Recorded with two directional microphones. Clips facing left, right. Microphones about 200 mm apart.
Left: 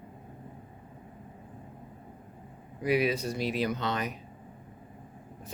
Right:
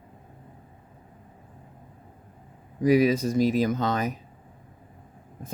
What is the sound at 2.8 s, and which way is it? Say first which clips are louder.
Speech: right 7 dB; 40° right (ahead or behind).